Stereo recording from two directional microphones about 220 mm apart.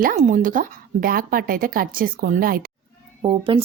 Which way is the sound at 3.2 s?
25° right (ahead or behind).